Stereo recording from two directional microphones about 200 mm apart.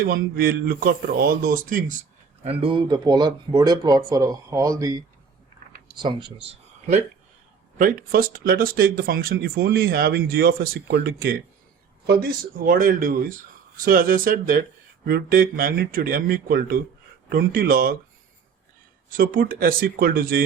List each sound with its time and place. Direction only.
0.1 s speech: 45° right (ahead or behind)
2.4 s speech: 30° right (ahead or behind)
7.8 s speech: 45° right (ahead or behind)
19.1 s speech: 45° right (ahead or behind)